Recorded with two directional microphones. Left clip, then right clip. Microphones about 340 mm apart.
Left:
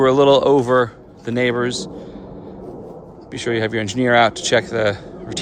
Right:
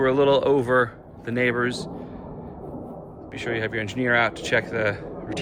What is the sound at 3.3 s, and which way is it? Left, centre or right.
Speech, centre.